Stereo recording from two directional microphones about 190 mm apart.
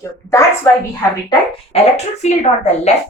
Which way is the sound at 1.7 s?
30° left (ahead or behind).